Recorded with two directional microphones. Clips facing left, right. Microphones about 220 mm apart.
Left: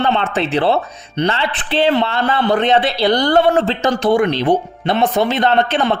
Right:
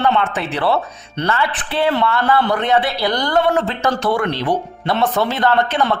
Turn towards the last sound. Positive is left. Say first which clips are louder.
# left 2 dB
turn(degrees=20)  # may be behind; listen again after turning